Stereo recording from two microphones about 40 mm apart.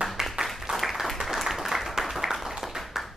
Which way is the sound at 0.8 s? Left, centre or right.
Centre.